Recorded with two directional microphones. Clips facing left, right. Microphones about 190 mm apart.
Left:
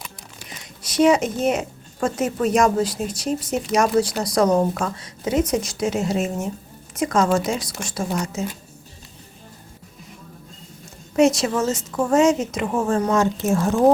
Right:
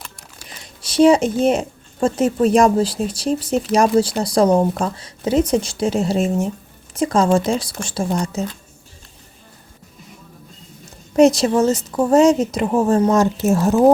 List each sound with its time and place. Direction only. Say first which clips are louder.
0.4 s speech: right 1 dB; 30° right (ahead or behind)
11.2 s speech: right 5 dB; 35° right (ahead or behind)